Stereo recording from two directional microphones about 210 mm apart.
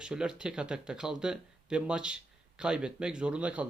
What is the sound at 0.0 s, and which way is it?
A man's voice, 5° right (ahead or behind).